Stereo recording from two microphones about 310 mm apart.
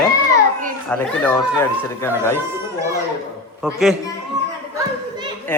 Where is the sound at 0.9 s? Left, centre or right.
Centre.